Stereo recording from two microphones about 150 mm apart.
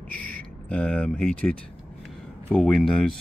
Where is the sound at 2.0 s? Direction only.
5° left (ahead or behind).